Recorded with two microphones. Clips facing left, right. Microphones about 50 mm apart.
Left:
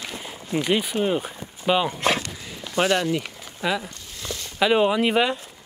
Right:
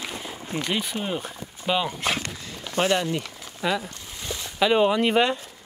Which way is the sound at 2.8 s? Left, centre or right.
Left.